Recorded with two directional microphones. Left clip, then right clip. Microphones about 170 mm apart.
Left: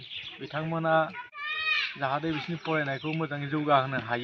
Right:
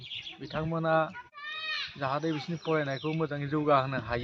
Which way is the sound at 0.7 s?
15° right (ahead or behind).